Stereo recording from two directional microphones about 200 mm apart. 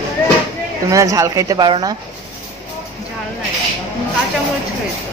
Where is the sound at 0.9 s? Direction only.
15° right (ahead or behind).